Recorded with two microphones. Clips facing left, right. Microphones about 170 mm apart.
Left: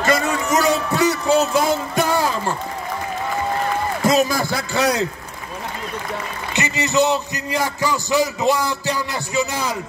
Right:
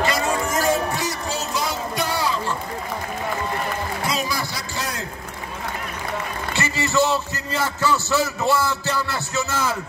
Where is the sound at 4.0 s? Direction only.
45° left (ahead or behind); by 5.0 s 70° left (ahead or behind).